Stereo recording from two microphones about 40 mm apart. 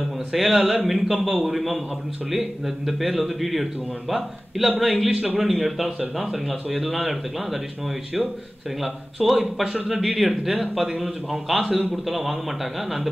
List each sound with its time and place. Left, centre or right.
0.3 s a man's voice: centre
5.1 s a man's voice: right
5.4 s a man's voice: centre
8.8 s a man's voice: centre